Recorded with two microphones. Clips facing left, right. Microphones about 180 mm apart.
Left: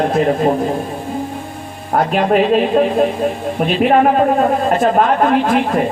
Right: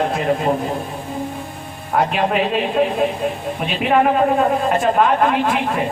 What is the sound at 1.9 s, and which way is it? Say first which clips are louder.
A man's voice: left 4 dB; 45° left (ahead or behind).